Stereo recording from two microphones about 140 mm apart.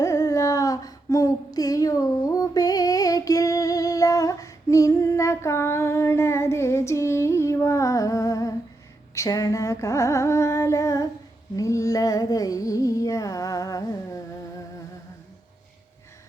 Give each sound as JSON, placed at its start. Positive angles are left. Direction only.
{"t": 0.0, "sound": "female singing", "side_deg": 20}
{"t": 9.1, "sound": "a sound", "side_deg": 25}
{"t": 11.5, "sound": "music", "side_deg": 20}